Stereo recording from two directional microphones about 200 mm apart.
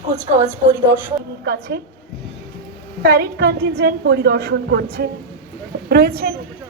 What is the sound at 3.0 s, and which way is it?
A woman's voice, 50° right (ahead or behind).